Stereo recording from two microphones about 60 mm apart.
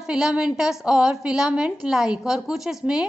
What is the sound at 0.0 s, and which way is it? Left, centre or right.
A woman's voice, centre.